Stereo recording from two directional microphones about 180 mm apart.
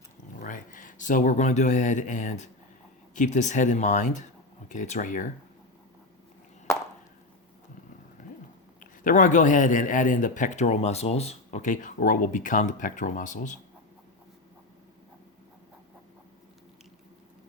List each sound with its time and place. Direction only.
0.3 s a man's voice: 45° left (ahead or behind)
8.2 s a sound: 45° left (ahead or behind)
8.8 s a man's voice: 45° left (ahead or behind)